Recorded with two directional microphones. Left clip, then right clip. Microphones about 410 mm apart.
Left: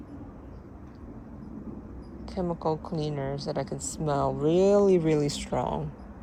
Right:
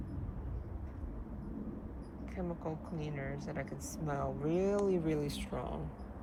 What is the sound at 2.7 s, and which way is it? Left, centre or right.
A woman's voice, left.